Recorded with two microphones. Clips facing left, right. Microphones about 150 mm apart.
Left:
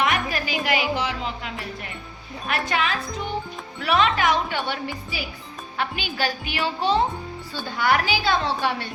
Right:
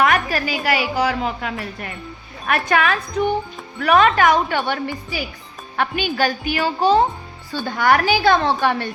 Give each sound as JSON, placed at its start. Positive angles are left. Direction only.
{"t": 0.0, "sound": "music", "side_deg": -50}
{"t": 0.9, "sound": "speech", "side_deg": -55}